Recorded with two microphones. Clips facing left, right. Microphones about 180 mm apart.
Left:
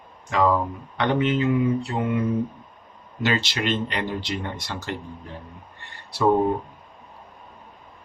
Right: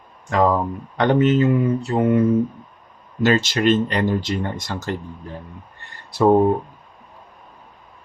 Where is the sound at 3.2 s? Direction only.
45° right (ahead or behind).